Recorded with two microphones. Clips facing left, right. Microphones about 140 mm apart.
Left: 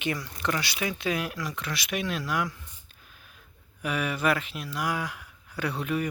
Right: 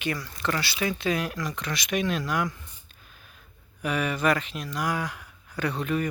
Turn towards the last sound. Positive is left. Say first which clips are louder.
# right 2 dB
turn(degrees=10)  # may be behind; listen again after turning